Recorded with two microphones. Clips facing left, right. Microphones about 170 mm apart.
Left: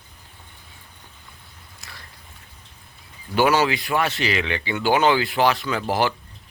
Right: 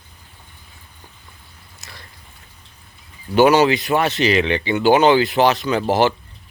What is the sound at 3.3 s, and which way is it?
Speech, 20° right (ahead or behind).